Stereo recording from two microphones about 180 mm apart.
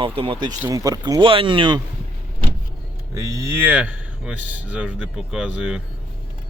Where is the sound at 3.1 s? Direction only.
20° right (ahead or behind).